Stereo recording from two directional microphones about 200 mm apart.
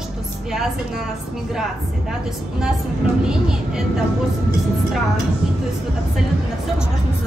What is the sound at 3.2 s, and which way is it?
Speech, 5° right (ahead or behind).